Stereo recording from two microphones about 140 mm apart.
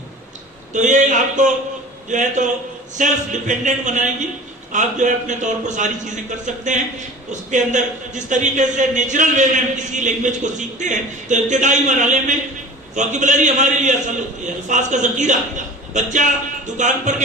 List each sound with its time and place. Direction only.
0.7 s a man's voice: 60° right (ahead or behind)
7.5 s a man's voice: 65° right (ahead or behind)